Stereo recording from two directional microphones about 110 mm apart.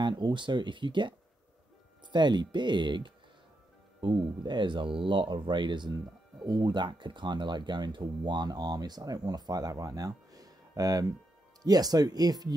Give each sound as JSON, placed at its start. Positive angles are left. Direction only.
{"t": 0.0, "sound": "speech", "side_deg": -45}
{"t": 2.1, "sound": "speech", "side_deg": -45}